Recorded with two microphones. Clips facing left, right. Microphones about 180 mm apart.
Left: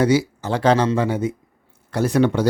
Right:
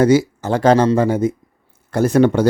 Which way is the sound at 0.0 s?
45° right (ahead or behind).